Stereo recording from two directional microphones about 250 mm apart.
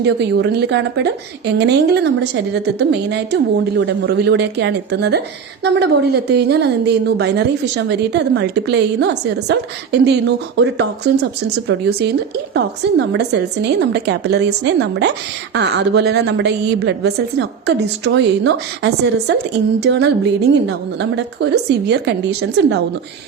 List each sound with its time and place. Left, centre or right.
0.0 s a woman's voice: right